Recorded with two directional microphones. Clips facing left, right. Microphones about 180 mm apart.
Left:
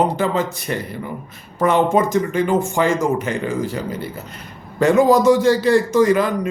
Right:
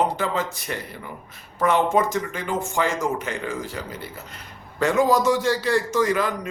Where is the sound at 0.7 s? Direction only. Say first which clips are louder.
Left 8 dB; 35° left (ahead or behind).